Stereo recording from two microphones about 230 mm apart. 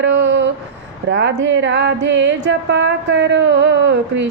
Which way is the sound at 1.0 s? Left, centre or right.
Right.